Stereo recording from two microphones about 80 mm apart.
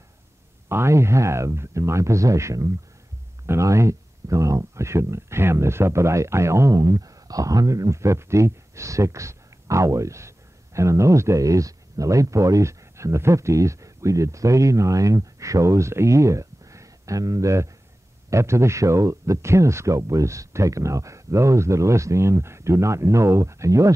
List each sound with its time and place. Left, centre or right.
0.7 s speech: right